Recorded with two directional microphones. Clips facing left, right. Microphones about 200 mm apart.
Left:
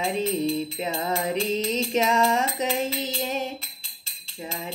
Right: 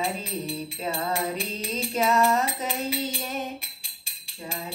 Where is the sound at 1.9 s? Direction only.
20° left (ahead or behind).